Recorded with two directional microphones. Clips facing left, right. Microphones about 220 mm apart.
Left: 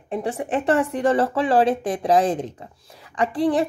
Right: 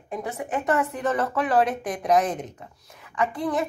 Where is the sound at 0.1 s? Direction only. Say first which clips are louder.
Left 5 dB; 30° left (ahead or behind).